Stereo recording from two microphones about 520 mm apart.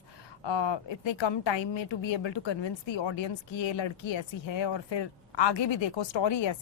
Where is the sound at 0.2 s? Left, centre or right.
Left.